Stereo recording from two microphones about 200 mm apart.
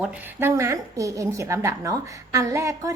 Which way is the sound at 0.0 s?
10° right (ahead or behind).